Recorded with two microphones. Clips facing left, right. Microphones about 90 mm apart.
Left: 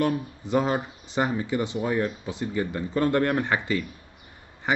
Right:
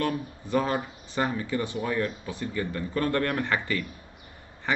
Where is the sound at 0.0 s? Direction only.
20° left (ahead or behind).